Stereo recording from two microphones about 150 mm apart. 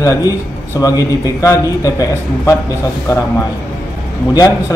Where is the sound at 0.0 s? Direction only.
20° left (ahead or behind).